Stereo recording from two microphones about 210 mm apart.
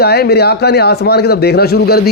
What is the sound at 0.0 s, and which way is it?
Speech, 50° left (ahead or behind).